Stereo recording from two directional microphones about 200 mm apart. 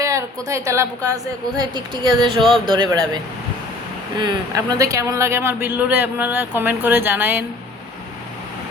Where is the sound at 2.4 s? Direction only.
Centre (ahead or behind).